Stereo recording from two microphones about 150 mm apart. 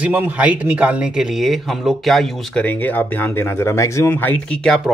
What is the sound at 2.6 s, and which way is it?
Speech, 10° left (ahead or behind).